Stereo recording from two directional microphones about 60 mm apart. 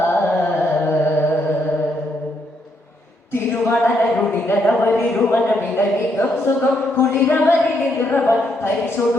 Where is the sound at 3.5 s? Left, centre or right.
Left.